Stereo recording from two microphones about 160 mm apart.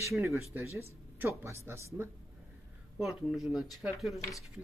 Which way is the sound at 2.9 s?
5° right (ahead or behind).